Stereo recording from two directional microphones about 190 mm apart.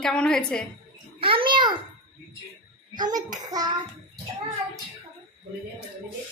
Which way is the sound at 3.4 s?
20° right (ahead or behind).